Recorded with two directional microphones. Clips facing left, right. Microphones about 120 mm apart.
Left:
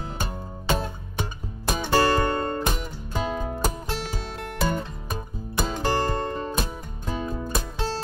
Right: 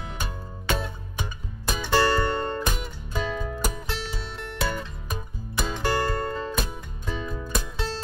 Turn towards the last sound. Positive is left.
turn(degrees=40)  # may be behind; listen again after turning